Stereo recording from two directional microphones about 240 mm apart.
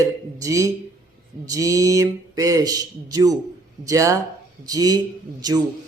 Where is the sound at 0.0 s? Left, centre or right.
Centre.